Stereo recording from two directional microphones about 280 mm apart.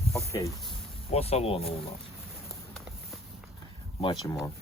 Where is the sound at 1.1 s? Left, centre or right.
Left.